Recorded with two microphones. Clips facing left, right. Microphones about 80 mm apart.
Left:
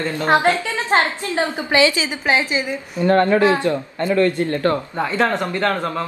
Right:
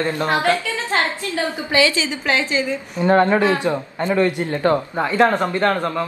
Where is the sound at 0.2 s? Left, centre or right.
Left.